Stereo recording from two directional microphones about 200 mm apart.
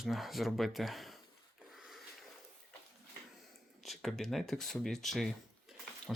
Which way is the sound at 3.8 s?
Centre (ahead or behind).